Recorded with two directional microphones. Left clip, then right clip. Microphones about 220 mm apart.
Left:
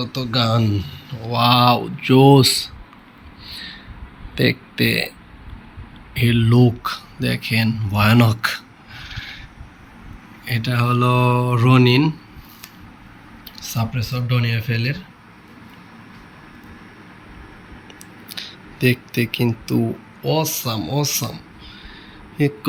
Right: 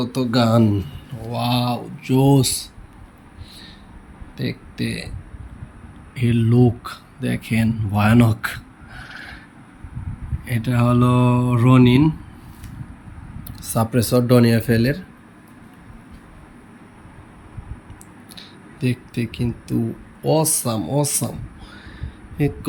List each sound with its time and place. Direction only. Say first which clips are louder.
0.0 s speech: right 1 dB; 20° right (ahead or behind)
1.3 s speech: left 8 dB; 5° right (ahead or behind)
3.5 s a sound: left 9 dB; 10° right (ahead or behind)
4.4 s speech: left 10 dB; 5° right (ahead or behind)
6.1 s speech: left 2 dB; 10° right (ahead or behind)
10.4 s speech: even; 15° right (ahead or behind)
13.7 s speech: right 10 dB; 30° right (ahead or behind)
18.3 s a sound: left 9 dB; 5° right (ahead or behind)
20.2 s speech: right 2 dB; 20° right (ahead or behind)
22.4 s speech: left 2 dB; 10° right (ahead or behind)